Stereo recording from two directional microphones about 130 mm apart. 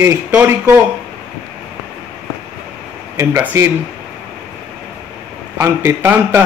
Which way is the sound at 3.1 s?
20° right (ahead or behind).